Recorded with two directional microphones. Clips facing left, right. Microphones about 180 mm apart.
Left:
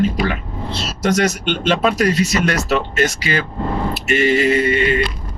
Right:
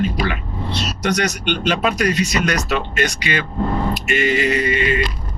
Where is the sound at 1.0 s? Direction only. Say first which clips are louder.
Left 4 dB; 40° left (ahead or behind).